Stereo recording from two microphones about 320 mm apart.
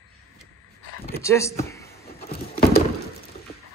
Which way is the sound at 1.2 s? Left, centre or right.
Centre.